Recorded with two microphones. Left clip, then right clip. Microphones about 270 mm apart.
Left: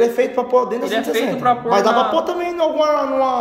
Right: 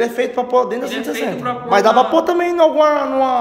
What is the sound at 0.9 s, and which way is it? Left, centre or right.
Speech, centre.